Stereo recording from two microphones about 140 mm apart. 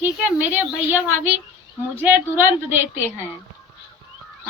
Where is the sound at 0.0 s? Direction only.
10° right (ahead or behind).